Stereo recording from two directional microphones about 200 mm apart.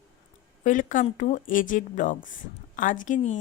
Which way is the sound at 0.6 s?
40° left (ahead or behind).